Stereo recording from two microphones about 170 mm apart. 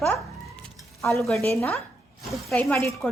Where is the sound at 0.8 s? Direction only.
Centre (ahead or behind).